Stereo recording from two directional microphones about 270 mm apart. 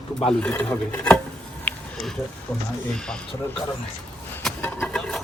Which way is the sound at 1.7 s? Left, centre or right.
Centre.